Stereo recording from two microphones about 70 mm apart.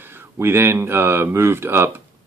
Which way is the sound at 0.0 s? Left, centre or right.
Right.